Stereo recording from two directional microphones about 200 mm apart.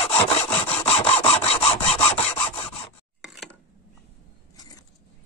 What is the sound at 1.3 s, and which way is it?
Rub, 30° left (ahead or behind).